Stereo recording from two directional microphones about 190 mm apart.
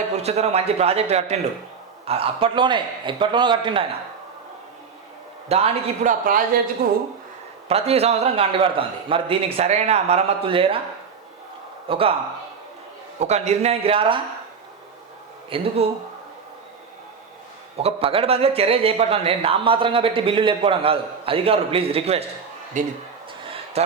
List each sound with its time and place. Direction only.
0.1 s a man's voice: 35° right (ahead or behind)
5.5 s a man's voice: 35° right (ahead or behind); by 7.0 s 50° right (ahead or behind)
7.7 s a man's voice: 30° right (ahead or behind)
11.9 s speech: 30° right (ahead or behind)
13.1 s a man's voice: 35° right (ahead or behind)
15.4 s a man's voice: 30° right (ahead or behind)
17.7 s a man's voice: 30° right (ahead or behind)